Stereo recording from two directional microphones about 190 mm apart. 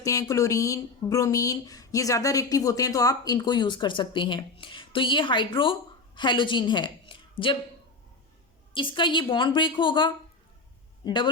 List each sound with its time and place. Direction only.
0.0 s a woman's voice: 15° left (ahead or behind)
8.7 s a man's voice: 25° left (ahead or behind)